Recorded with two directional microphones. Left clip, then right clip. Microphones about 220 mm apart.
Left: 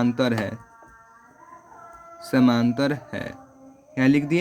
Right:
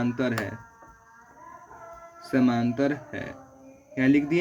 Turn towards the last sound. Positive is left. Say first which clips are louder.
# left 2 dB
turn(degrees=50)  # may be behind; listen again after turning